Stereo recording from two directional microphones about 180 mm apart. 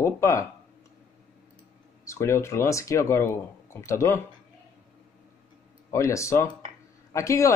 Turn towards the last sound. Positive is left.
turn(degrees=15)  # may be behind; listen again after turning